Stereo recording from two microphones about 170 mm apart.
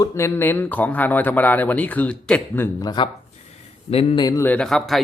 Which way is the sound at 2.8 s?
25° left (ahead or behind).